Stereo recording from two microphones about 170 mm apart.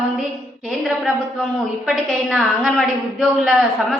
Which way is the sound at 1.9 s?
Centre (ahead or behind).